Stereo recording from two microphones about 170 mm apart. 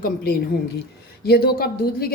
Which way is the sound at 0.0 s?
60° left (ahead or behind).